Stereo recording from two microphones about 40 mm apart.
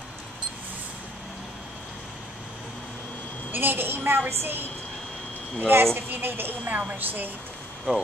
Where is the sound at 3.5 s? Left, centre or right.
Right.